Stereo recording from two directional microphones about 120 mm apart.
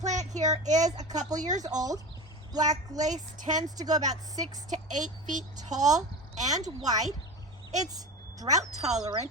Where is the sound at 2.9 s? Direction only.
90° right.